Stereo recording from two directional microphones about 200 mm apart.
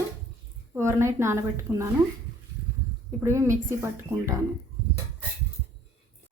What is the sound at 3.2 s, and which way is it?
A woman's voice, 15° right (ahead or behind).